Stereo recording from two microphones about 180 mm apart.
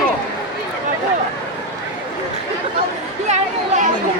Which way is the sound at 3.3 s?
40° right (ahead or behind).